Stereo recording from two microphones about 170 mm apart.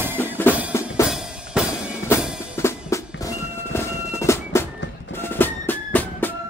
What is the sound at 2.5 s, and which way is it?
Music, 15° left (ahead or behind).